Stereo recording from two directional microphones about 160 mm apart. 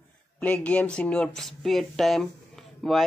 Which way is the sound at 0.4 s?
10° left (ahead or behind).